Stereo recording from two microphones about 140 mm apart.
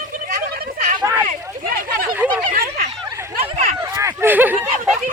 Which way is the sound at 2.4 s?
90° right.